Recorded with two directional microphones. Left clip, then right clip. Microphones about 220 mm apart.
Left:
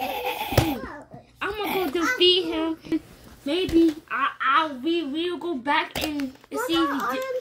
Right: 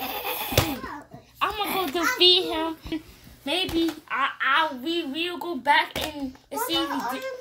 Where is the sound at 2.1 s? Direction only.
45° right (ahead or behind).